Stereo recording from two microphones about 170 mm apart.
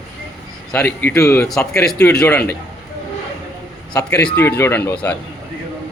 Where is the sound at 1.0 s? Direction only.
15° left (ahead or behind).